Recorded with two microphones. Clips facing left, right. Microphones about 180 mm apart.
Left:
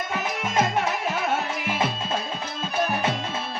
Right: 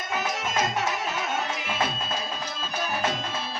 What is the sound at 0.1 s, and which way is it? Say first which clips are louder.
Music: right 3 dB; 60° left (ahead or behind).